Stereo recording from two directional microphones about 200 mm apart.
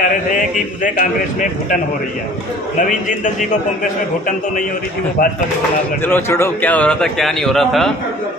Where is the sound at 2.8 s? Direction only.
40° left (ahead or behind).